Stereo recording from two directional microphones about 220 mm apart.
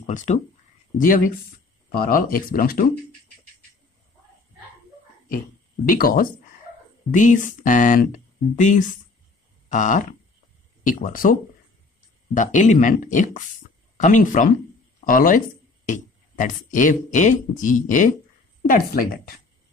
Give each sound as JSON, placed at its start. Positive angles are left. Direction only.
{"t": 0.0, "sound": "speech", "side_deg": 35}
{"t": 5.9, "sound": "speech", "side_deg": 40}
{"t": 9.7, "sound": "a sound", "side_deg": 35}
{"t": 10.8, "sound": "speech", "side_deg": 35}
{"t": 12.4, "sound": "speech", "side_deg": 35}